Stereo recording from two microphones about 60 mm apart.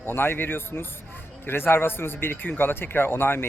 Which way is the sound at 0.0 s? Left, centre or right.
Left.